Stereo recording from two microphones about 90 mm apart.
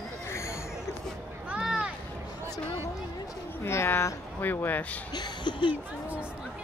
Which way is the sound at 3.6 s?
25° left (ahead or behind).